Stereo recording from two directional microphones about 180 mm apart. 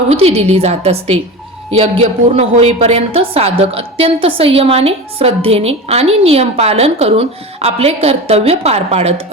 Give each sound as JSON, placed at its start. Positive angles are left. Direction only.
{"t": 0.1, "sound": "a woman's voice", "side_deg": -35}
{"t": 2.3, "sound": "a woman's voice", "side_deg": -35}